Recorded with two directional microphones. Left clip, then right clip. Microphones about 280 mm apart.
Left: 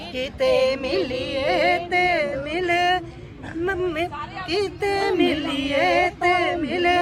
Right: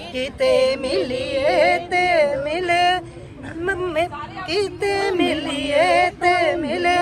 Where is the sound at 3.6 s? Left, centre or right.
Centre.